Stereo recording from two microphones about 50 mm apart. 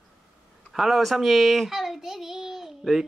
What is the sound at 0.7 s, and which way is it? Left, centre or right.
A child's voice, centre.